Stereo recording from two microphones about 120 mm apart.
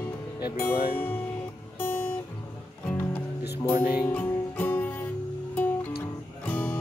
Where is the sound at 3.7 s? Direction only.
15° right (ahead or behind).